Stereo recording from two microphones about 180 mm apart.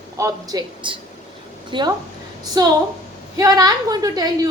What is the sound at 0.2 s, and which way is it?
A woman's voice, 20° right (ahead or behind).